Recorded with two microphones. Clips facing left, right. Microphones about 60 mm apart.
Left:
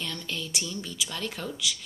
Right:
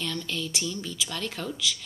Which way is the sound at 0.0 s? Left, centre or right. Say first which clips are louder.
Right 3 dB; left.